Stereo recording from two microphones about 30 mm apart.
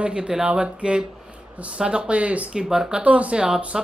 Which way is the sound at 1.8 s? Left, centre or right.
Right.